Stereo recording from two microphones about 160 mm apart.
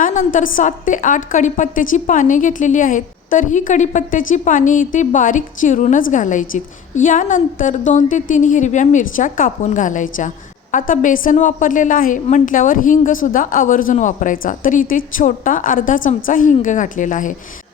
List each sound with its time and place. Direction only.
0.0 s a woman's voice: 55° left (ahead or behind)